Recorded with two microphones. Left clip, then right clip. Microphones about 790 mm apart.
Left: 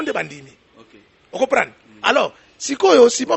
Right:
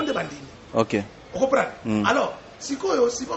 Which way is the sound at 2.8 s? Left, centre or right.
Left.